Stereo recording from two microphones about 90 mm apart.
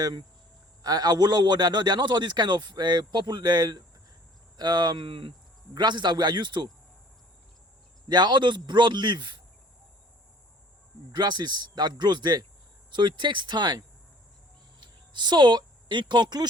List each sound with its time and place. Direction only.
0.0 s a man's voice: 55° right (ahead or behind)
5.7 s a man's voice: 55° right (ahead or behind)
8.0 s a man's voice: 55° right (ahead or behind)
11.1 s a man's voice: 55° right (ahead or behind)